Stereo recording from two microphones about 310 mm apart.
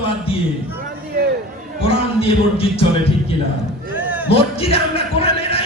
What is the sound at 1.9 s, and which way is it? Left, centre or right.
Music, centre.